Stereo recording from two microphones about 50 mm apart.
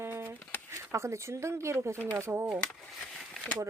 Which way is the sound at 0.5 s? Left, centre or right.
Left.